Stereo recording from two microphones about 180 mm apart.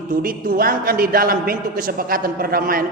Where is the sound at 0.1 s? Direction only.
50° right (ahead or behind).